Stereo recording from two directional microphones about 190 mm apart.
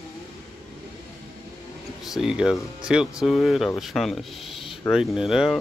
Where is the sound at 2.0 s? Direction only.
Centre (ahead or behind).